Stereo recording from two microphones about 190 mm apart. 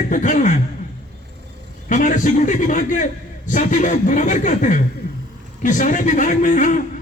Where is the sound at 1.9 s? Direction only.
40° left (ahead or behind).